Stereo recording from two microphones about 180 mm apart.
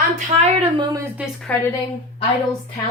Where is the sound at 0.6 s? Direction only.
25° right (ahead or behind).